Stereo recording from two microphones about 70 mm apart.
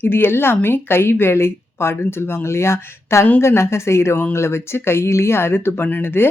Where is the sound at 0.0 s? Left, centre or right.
Left.